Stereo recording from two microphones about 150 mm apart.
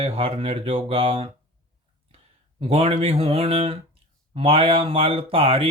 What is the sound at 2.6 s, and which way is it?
Speech, 40° right (ahead or behind).